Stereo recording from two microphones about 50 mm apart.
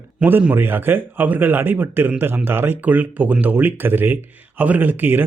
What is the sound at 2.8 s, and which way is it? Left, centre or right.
A man's voice, right.